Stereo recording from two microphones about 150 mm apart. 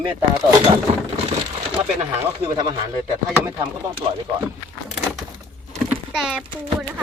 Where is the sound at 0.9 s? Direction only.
45° right (ahead or behind).